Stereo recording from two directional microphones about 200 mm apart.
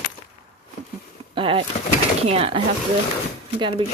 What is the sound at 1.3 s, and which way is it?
Speech, 25° right (ahead or behind).